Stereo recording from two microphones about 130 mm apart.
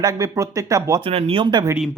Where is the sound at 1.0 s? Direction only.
45° right (ahead or behind).